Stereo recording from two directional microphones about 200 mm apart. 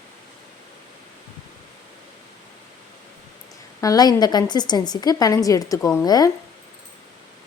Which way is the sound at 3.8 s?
20° left (ahead or behind).